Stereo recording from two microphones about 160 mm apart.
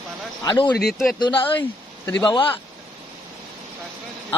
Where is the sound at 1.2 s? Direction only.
25° left (ahead or behind).